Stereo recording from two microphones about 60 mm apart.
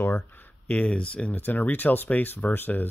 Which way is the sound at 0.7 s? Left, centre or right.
Left.